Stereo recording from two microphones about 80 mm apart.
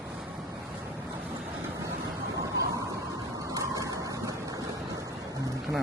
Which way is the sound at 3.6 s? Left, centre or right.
Right.